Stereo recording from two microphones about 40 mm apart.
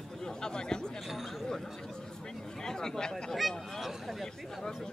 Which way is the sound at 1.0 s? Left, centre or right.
Centre.